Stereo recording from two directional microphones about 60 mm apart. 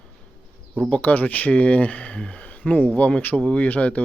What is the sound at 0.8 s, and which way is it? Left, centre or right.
Speech, left.